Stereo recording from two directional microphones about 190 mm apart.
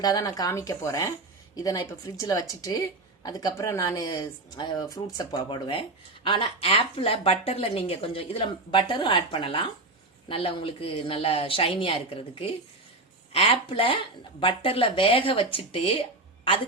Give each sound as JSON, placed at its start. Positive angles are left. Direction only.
{"t": 0.0, "sound": "speech", "side_deg": 20}